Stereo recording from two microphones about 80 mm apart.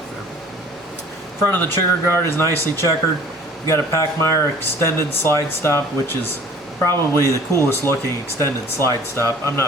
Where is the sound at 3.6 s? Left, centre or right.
Left.